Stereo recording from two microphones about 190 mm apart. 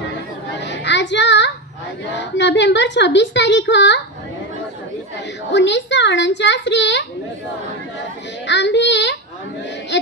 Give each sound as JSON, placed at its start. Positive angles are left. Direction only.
{"t": 0.6, "sound": "child singing", "side_deg": 70}
{"t": 2.1, "sound": "a woman's voice", "side_deg": 70}
{"t": 5.5, "sound": "a woman's voice", "side_deg": 70}
{"t": 8.5, "sound": "a woman's voice", "side_deg": 70}